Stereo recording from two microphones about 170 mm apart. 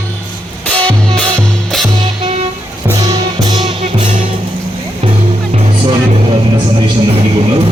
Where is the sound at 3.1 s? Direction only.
30° right (ahead or behind).